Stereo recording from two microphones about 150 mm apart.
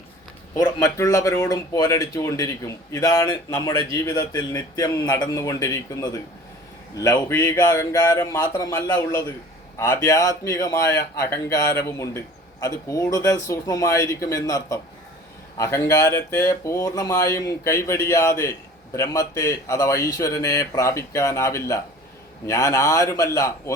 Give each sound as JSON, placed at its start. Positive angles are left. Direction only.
{"t": 0.5, "sound": "speech", "side_deg": 20}